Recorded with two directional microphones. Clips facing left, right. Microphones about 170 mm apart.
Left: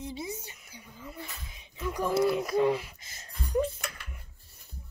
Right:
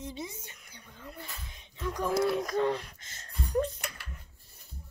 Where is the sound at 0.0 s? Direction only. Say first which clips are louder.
Left 3 dB; 10° left (ahead or behind).